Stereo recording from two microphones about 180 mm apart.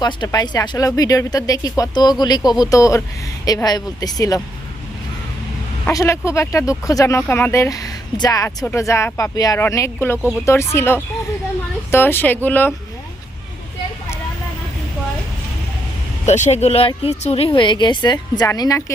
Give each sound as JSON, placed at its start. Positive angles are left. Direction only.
{"t": 0.0, "sound": "speech", "side_deg": 20}
{"t": 5.9, "sound": "speech", "side_deg": 15}
{"t": 16.2, "sound": "speech", "side_deg": 40}